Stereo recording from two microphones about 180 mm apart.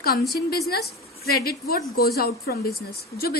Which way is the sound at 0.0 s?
60° left (ahead or behind).